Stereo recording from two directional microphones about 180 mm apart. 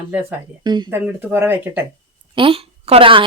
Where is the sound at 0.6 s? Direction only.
25° right (ahead or behind).